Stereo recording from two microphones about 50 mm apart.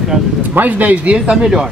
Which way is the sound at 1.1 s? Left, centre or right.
Centre.